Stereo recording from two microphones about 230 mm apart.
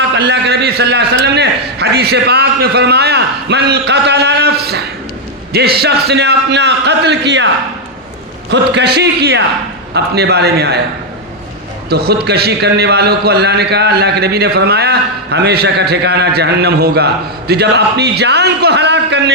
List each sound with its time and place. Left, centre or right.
0.1 s a man's voice: right
11.9 s a man's voice: right